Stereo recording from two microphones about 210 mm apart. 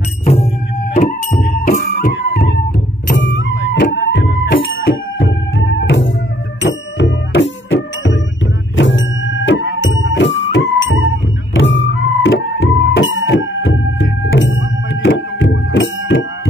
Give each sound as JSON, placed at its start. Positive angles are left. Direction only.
{"t": 0.2, "sound": "music", "side_deg": 30}
{"t": 2.1, "sound": "music", "side_deg": 60}